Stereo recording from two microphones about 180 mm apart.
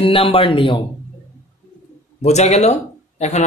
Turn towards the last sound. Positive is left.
turn(degrees=40)  # may be behind; listen again after turning